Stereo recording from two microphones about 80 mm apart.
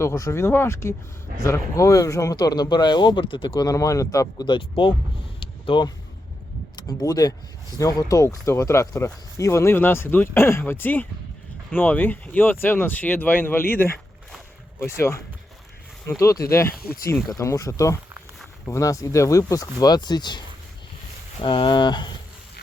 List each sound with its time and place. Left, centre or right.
0.0 s speech: left
2.3 s speech: left
3.5 s speech: left
5.4 s vehicle: left
6.7 s speech: left
16.2 s speech: left
21.4 s speech: left